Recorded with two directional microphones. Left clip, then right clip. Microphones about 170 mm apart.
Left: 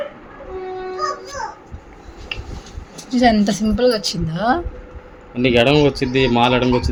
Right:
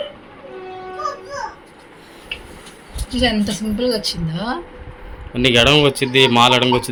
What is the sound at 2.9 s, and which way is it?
Speech, 45° left (ahead or behind).